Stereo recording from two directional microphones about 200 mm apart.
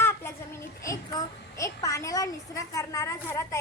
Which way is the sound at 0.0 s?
10° left (ahead or behind).